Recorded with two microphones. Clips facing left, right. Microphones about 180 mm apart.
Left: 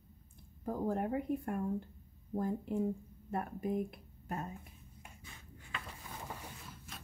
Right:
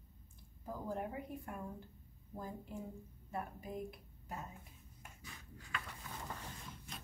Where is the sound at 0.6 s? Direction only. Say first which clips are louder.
Left 7 dB; 55° left (ahead or behind).